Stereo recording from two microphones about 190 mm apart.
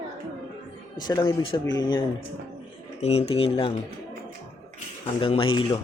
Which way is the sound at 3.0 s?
35° left (ahead or behind).